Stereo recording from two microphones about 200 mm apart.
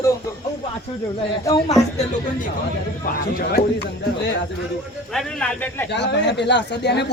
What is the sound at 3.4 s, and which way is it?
Speech, 50° left (ahead or behind).